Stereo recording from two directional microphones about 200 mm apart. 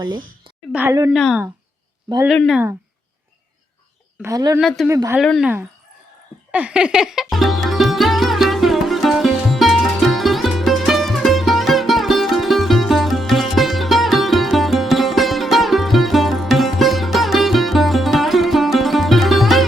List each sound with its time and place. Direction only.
0.7 s speech: 10° right (ahead or behind)
1.1 s speech: centre (ahead or behind)
4.2 s speech: 15° right (ahead or behind)
5.2 s speech: centre (ahead or behind)
6.5 s music: 5° right (ahead or behind)